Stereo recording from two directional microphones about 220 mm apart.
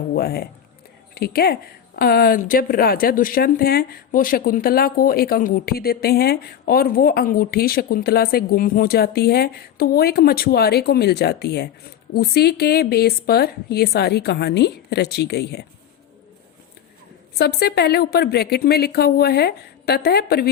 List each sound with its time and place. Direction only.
0.1 s a woman's voice: 45° left (ahead or behind)
17.3 s a woman's voice: 45° left (ahead or behind)